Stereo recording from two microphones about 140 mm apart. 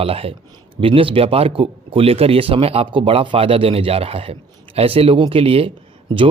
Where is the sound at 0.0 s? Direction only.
45° right (ahead or behind).